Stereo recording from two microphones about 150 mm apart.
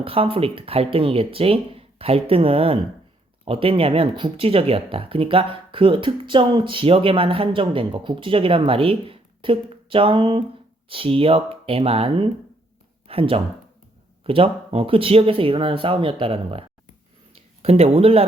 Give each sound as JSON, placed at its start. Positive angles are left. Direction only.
{"t": 0.0, "sound": "speech", "side_deg": -40}